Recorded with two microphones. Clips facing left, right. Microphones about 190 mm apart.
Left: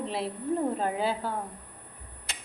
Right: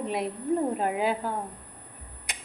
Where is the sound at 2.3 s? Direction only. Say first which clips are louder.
Right 1 dB; 15° right (ahead or behind).